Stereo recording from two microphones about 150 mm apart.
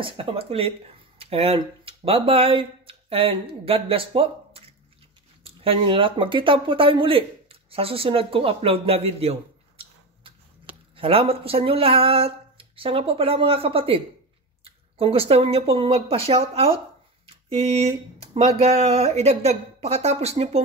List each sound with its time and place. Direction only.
0.0 s speech: 40° right (ahead or behind)